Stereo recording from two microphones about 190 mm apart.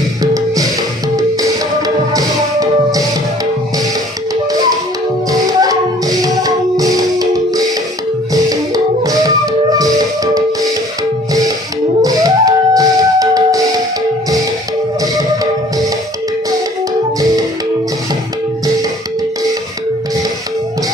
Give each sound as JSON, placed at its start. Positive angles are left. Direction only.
{"t": 0.2, "sound": "music", "side_deg": -20}
{"t": 2.1, "sound": "music", "side_deg": -20}
{"t": 5.3, "sound": "music", "side_deg": -20}
{"t": 12.0, "sound": "music", "side_deg": -20}